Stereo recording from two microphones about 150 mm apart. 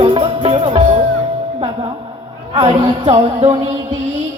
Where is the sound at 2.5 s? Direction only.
30° right (ahead or behind).